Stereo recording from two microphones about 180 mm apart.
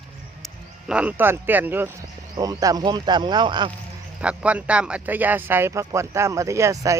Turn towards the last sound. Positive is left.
turn(degrees=-20)  # may be behind; listen again after turning